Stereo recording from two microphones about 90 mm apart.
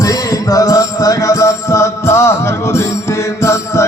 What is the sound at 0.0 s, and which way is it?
Music, 40° left (ahead or behind).